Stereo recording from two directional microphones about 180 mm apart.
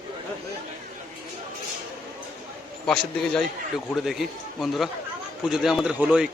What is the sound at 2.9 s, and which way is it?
A man's voice, centre (ahead or behind).